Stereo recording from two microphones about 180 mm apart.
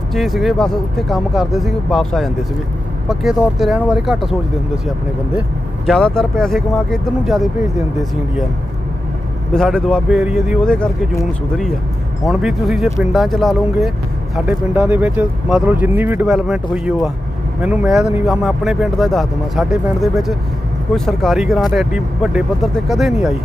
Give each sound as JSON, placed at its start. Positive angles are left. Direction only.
{"t": 0.1, "sound": "speech", "side_deg": 0}
{"t": 5.8, "sound": "speech", "side_deg": 5}
{"t": 9.5, "sound": "speech", "side_deg": 5}
{"t": 12.3, "sound": "speech", "side_deg": -5}